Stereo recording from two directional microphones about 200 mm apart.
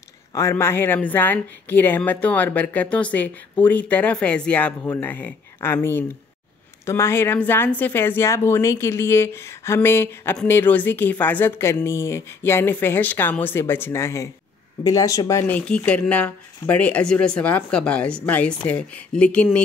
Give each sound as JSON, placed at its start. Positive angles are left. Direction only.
{"t": 0.3, "sound": "a woman's voice", "side_deg": 15}